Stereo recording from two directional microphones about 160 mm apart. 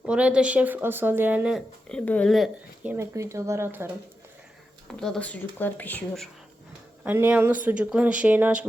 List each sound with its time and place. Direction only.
0.0 s speech: 5° right (ahead or behind)
2.9 s speech: 20° right (ahead or behind)
4.9 s speech: 5° left (ahead or behind)
7.0 s speech: 10° right (ahead or behind)